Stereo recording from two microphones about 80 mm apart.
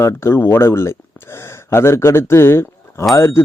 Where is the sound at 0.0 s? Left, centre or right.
Left.